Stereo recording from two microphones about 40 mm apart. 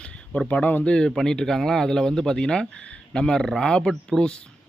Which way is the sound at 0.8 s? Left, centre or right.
Left.